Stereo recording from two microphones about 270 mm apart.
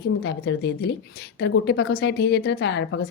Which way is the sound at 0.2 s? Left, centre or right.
Left.